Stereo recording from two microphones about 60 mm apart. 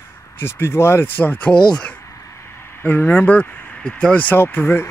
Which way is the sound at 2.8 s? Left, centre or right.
Left.